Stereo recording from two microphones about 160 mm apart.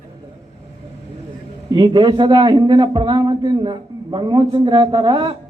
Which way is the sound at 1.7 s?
30° right (ahead or behind).